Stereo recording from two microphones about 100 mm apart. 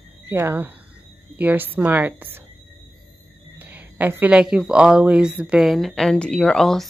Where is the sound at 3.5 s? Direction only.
20° right (ahead or behind); by 6.9 s 5° left (ahead or behind).